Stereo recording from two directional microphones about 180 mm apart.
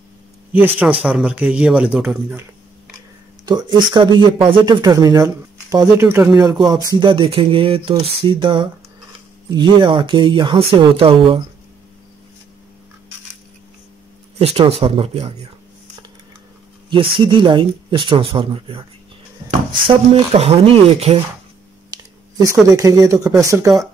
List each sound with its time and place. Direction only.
0.5 s speech: 10° right (ahead or behind)
3.4 s speech: 25° right (ahead or behind)
14.4 s speech: 35° right (ahead or behind)
16.9 s speech: 30° right (ahead or behind)
19.9 s speech: 30° right (ahead or behind)
21.9 s speech: 20° right (ahead or behind)